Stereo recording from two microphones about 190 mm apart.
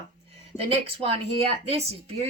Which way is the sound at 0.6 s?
30° right (ahead or behind).